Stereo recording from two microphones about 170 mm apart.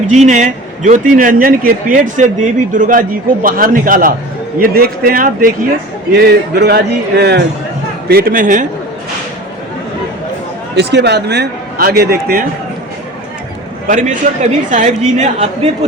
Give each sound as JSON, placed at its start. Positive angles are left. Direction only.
{"t": 0.1, "sound": "a woman's voice", "side_deg": -45}
{"t": 6.1, "sound": "speech", "side_deg": -70}
{"t": 8.0, "sound": "a woman's voice", "side_deg": -60}
{"t": 10.8, "sound": "a man's voice", "side_deg": -85}
{"t": 13.8, "sound": "a woman's voice", "side_deg": -50}